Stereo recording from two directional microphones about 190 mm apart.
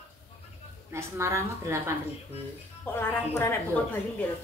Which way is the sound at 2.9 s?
15° left (ahead or behind).